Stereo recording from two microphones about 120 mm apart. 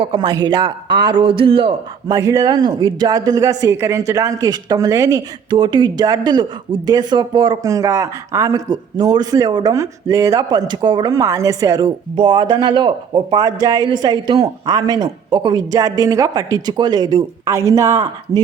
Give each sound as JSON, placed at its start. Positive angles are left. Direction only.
{"t": 0.0, "sound": "speech", "side_deg": -40}
{"t": 2.0, "sound": "speech", "side_deg": -30}
{"t": 7.6, "sound": "speech", "side_deg": -25}
{"t": 11.1, "sound": "a woman's voice", "side_deg": -25}
{"t": 12.1, "sound": "speech", "side_deg": -40}
{"t": 17.5, "sound": "a woman's voice", "side_deg": -25}